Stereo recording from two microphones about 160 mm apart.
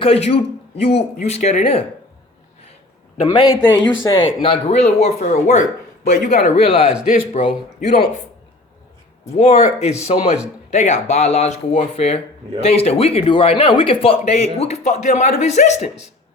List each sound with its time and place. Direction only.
0.0 s speech: 40° left (ahead or behind)
3.2 s speech: 25° left (ahead or behind); by 8.0 s 45° left (ahead or behind)
9.3 s speech: 45° left (ahead or behind)